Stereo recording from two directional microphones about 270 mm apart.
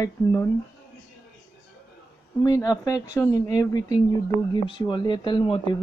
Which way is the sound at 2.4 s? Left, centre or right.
Centre.